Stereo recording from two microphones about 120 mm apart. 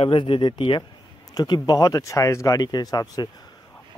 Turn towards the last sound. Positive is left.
turn(degrees=35)  # may be behind; listen again after turning